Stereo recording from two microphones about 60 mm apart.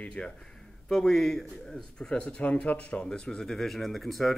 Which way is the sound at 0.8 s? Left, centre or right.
Centre.